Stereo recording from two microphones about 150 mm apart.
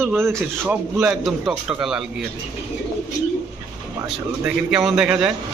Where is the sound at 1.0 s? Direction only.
Centre (ahead or behind).